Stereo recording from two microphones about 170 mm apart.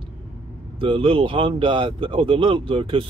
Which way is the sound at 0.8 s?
30° right (ahead or behind).